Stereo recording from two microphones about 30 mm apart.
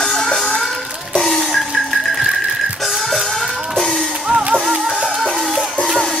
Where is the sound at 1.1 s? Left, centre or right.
Centre.